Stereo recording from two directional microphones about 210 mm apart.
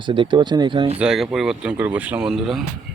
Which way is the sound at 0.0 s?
25° right (ahead or behind).